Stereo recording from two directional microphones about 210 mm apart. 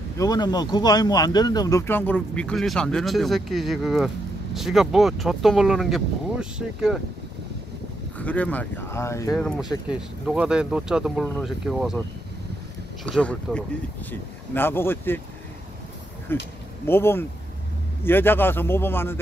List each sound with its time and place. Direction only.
0.2 s speech: 20° left (ahead or behind); by 7.0 s centre (ahead or behind)
8.2 s speech: 5° left (ahead or behind)
9.3 s speech: centre (ahead or behind)
13.0 s speech: 5° left (ahead or behind)
16.3 s speech: 10° left (ahead or behind)